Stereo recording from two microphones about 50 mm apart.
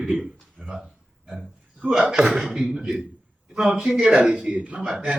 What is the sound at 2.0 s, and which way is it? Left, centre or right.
A man's voice, centre.